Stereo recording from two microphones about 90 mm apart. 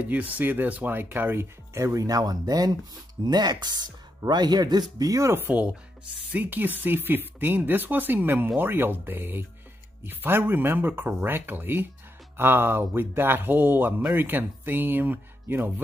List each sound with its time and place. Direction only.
0.0 s speech: 15° right (ahead or behind); by 5.3 s 40° right (ahead or behind)
5.3 s speech: 20° right (ahead or behind)